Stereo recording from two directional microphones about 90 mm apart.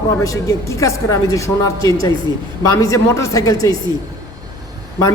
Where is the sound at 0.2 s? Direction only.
40° left (ahead or behind).